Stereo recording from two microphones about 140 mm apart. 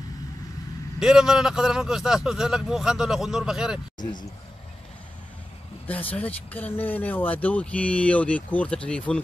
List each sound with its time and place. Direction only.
0.9 s speech: 5° right (ahead or behind)
4.0 s speech: 30° left (ahead or behind)
5.9 s speech: 10° left (ahead or behind)